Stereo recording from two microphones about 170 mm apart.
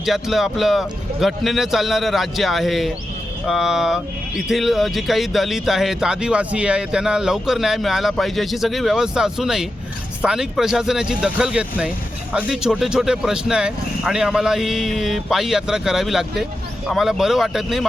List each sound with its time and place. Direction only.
0.0 s speech: centre (ahead or behind)